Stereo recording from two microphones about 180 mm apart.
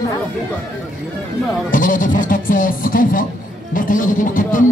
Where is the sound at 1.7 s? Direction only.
50° left (ahead or behind).